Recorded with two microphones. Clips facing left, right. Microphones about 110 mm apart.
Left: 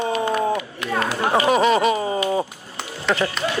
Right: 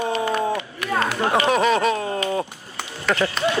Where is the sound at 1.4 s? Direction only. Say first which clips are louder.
Left 3 dB; 5° left (ahead or behind).